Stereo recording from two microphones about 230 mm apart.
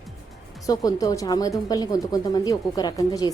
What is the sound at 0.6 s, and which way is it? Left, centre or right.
A woman's voice, centre.